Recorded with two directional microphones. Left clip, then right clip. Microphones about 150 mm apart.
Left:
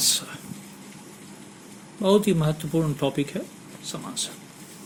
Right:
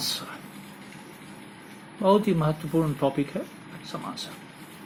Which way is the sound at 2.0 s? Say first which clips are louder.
Left 1 dB; 65° left (ahead or behind).